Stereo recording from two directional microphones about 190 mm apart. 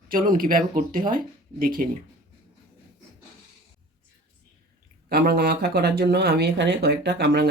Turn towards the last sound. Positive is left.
turn(degrees=-60)  # may be behind; listen again after turning